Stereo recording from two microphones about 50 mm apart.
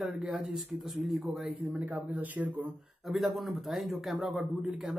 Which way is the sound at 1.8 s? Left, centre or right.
Right.